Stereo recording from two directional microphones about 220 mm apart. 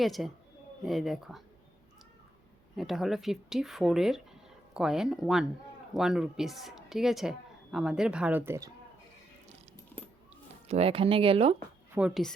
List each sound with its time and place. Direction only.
0.0 s speech: centre (ahead or behind)
2.7 s speech: centre (ahead or behind)
10.7 s speech: 25° right (ahead or behind)
11.9 s speech: 5° right (ahead or behind)